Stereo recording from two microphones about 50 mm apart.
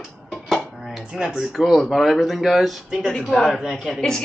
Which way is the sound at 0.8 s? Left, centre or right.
Centre.